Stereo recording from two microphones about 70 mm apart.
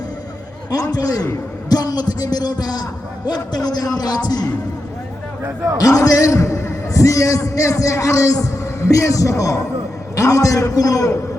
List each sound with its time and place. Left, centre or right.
0.7 s a man's voice: left
5.7 s a man's voice: left